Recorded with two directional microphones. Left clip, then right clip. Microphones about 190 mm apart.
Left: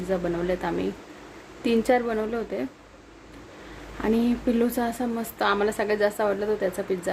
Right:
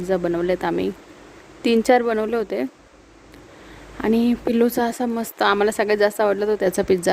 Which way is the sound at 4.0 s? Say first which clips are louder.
Right 4 dB; 55° right (ahead or behind).